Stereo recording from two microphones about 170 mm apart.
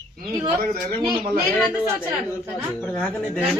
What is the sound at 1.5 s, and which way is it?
Speech, centre (ahead or behind).